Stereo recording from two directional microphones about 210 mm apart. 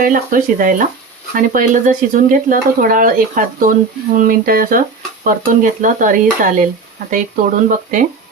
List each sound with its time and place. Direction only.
0.0 s speech: 40° right (ahead or behind)